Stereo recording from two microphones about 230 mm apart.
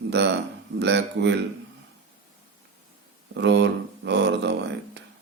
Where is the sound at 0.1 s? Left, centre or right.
Right.